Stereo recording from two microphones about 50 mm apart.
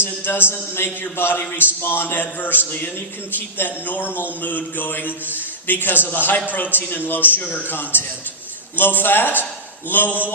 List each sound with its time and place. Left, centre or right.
0.0 s a man's voice: left